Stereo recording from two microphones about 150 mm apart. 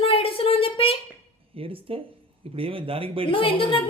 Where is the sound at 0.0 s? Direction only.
40° left (ahead or behind).